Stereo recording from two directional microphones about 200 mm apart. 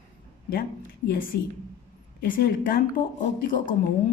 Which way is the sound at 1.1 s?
45° left (ahead or behind).